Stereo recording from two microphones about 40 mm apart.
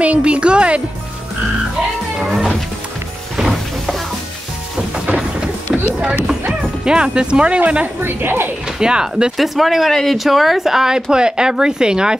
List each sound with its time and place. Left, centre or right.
0.0 s music: right
2.1 s speech: centre
3.5 s music: centre
4.9 s music: right
5.7 s clip-clop: centre
6.8 s speech: right
8.0 s a woman's voice: right
8.7 s speech: centre
9.4 s speech: centre
11.1 s speech: centre